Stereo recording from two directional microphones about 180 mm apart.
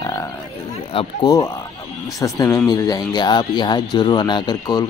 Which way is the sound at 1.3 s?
20° left (ahead or behind).